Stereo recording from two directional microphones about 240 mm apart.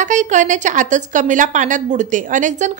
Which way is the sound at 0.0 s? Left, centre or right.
Right.